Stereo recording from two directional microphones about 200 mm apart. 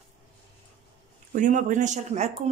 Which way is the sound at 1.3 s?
40° right (ahead or behind).